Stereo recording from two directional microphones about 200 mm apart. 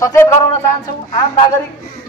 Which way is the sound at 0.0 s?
15° left (ahead or behind).